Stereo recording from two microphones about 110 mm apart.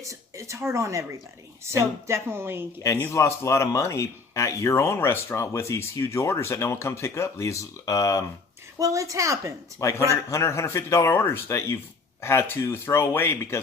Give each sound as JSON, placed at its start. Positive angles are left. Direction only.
{"t": 0.0, "sound": "speech", "side_deg": -30}
{"t": 2.8, "sound": "speech", "side_deg": 25}
{"t": 8.8, "sound": "speech", "side_deg": -30}
{"t": 9.8, "sound": "speech", "side_deg": 25}